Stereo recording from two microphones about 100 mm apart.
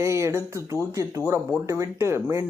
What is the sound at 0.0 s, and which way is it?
Speech, 30° right (ahead or behind).